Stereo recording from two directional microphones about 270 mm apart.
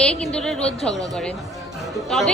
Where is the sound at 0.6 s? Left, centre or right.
Left.